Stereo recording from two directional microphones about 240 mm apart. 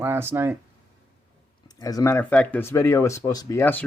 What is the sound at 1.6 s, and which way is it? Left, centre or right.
Speech, centre.